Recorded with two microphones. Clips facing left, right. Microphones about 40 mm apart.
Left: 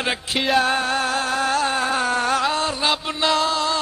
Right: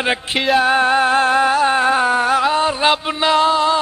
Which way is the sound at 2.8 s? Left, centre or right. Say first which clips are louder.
Right 5 dB; right.